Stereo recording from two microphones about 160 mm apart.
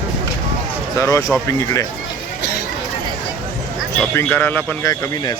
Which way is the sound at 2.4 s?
90° left.